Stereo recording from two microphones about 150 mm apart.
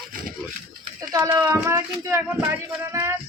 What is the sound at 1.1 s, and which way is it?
Speech, 20° right (ahead or behind).